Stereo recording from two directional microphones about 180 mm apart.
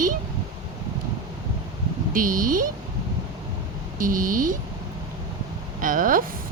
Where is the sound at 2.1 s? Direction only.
50° right (ahead or behind).